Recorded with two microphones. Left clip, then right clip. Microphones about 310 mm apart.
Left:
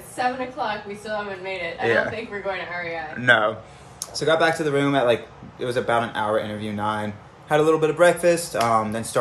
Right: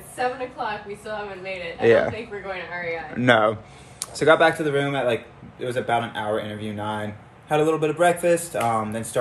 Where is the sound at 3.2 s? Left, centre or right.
Centre.